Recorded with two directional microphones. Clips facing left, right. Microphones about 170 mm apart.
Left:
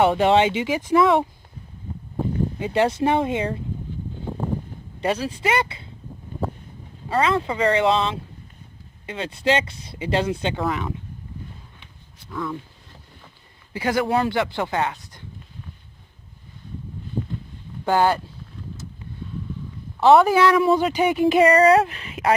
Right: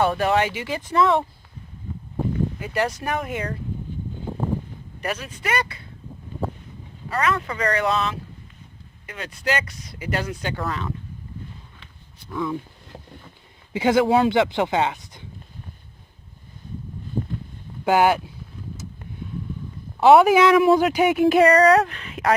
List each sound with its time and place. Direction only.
0.0 s speech: 20° left (ahead or behind)
2.3 s speech: 25° left (ahead or behind)
4.9 s speech: 30° left (ahead or behind)
7.1 s speech: 25° left (ahead or behind)
13.7 s speech: 20° right (ahead or behind)
17.8 s speech: 15° right (ahead or behind)
20.0 s speech: 10° right (ahead or behind)
20.6 s speech: 5° right (ahead or behind)